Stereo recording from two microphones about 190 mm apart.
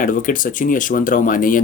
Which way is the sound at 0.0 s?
45° left (ahead or behind).